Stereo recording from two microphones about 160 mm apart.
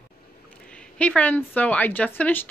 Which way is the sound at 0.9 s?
10° left (ahead or behind).